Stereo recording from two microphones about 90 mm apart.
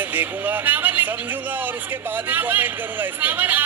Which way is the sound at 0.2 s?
20° right (ahead or behind).